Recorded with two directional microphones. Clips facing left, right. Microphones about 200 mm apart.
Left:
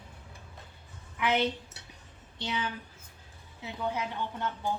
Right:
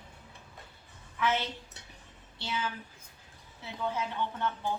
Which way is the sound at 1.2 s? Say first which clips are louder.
Left 3 dB; 15° left (ahead or behind).